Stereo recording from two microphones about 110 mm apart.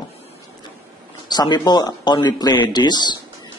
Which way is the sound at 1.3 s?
40° left (ahead or behind).